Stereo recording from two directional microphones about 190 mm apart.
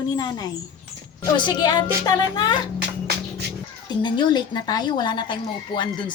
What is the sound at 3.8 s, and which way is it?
Speech, 25° left (ahead or behind).